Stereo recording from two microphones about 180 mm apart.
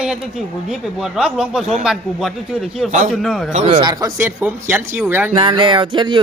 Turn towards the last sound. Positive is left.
turn(degrees=-25)  # may be behind; listen again after turning